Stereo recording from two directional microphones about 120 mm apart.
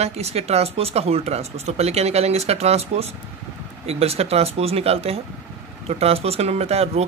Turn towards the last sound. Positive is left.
turn(degrees=-60)  # may be behind; listen again after turning